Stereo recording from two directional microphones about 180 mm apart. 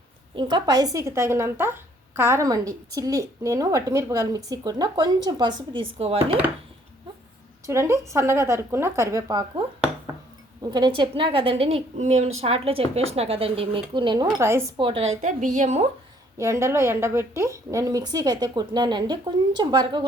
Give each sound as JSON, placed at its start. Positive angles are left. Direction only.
{"t": 0.3, "sound": "a woman's voice", "side_deg": -25}
{"t": 7.7, "sound": "a woman's voice", "side_deg": -15}
{"t": 10.7, "sound": "a woman's voice", "side_deg": -25}
{"t": 14.8, "sound": "a woman's voice", "side_deg": -30}
{"t": 15.2, "sound": "a woman's voice", "side_deg": -45}
{"t": 16.4, "sound": "a woman's voice", "side_deg": -15}